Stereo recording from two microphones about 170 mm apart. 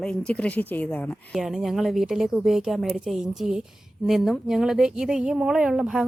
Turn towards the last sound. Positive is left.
turn(degrees=-5)  # may be behind; listen again after turning